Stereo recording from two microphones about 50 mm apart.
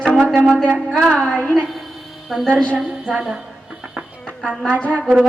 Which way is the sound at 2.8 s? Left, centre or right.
Centre.